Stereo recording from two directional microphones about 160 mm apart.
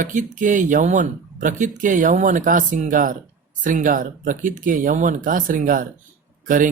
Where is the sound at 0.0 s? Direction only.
55° right (ahead or behind).